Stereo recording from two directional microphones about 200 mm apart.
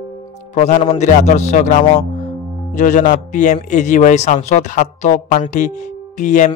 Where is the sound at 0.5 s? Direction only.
35° left (ahead or behind).